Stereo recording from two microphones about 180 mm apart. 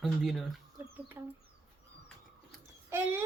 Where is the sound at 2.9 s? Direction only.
10° right (ahead or behind).